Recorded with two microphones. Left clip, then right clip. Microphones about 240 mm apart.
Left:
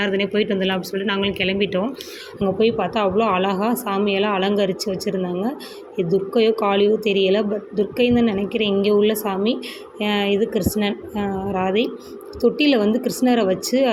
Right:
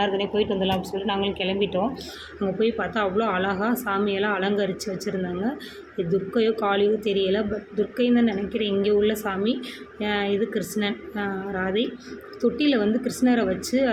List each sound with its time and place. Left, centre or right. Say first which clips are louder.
0.0 s a woman's voice: left 3 dB; left
2.6 s a woman's voice: left 5 dB; centre